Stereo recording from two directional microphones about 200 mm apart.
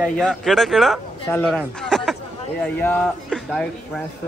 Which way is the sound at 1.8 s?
5° left (ahead or behind).